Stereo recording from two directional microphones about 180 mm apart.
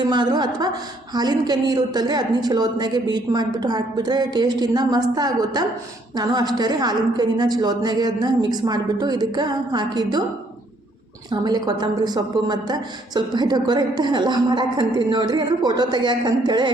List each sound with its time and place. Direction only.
0.0 s a woman's voice: 25° right (ahead or behind)
11.3 s a woman's voice: 20° right (ahead or behind)